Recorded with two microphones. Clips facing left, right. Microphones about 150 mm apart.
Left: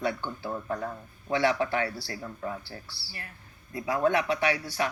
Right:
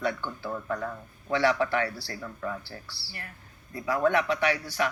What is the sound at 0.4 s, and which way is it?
Speech, 25° left (ahead or behind).